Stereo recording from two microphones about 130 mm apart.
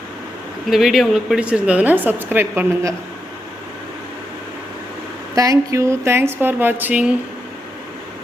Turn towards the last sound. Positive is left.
turn(degrees=-10)  # may be behind; listen again after turning